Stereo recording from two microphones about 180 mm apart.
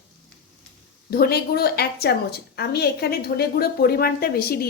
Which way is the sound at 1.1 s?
60° left (ahead or behind).